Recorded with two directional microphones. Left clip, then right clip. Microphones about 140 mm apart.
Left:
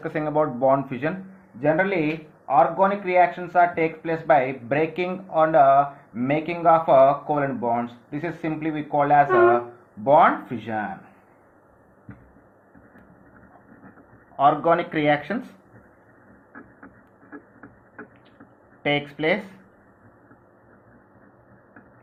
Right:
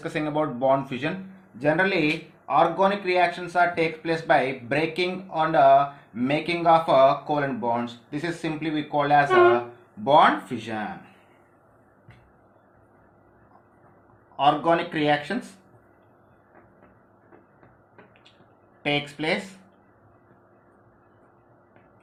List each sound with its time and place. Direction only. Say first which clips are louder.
0.0 s speech: left 3 dB; 20° left (ahead or behind); by 10.8 s 40° left (ahead or behind)
14.3 s speech: left 2 dB; 45° left (ahead or behind)
18.8 s speech: left 3 dB; 40° left (ahead or behind)